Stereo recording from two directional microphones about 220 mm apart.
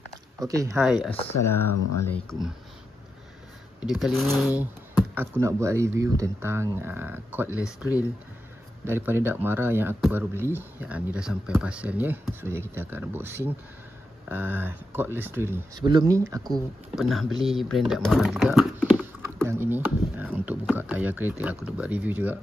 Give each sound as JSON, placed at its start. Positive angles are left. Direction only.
{"t": 0.4, "sound": "speech", "side_deg": -15}
{"t": 0.8, "sound": "speech", "side_deg": 0}
{"t": 1.4, "sound": "speech", "side_deg": 10}
{"t": 1.7, "sound": "speech", "side_deg": 90}
{"t": 2.1, "sound": "speech", "side_deg": 5}
{"t": 3.8, "sound": "speech", "side_deg": 0}
{"t": 16.4, "sound": "speech", "side_deg": 0}